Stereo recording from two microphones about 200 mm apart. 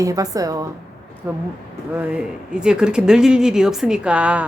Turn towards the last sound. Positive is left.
turn(degrees=-5)  # may be behind; listen again after turning